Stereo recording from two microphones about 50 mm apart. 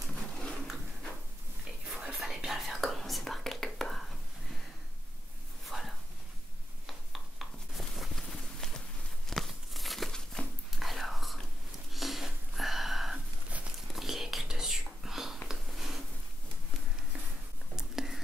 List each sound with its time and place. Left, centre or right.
0.3 s a sound: centre
1.9 s whispering: centre
5.7 s dog: centre
6.9 s a sound: centre
9.3 s crumpling: centre
10.4 s dog: centre
10.8 s whispering: centre
11.9 s wheeze: centre
13.9 s whispering: centre
15.4 s a sound: centre
17.7 s whispering: centre